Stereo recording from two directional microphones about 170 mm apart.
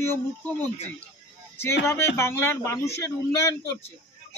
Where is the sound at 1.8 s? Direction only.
15° left (ahead or behind).